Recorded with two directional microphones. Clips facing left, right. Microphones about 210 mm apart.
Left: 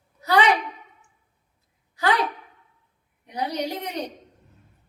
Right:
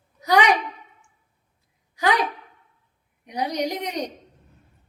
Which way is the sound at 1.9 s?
15° right (ahead or behind).